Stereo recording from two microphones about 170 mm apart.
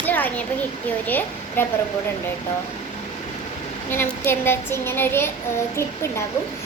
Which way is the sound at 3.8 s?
10° left (ahead or behind).